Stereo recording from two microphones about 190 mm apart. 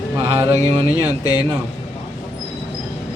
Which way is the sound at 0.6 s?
20° left (ahead or behind).